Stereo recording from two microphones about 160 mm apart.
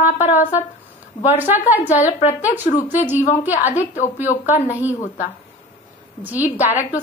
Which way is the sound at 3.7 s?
45° left (ahead or behind).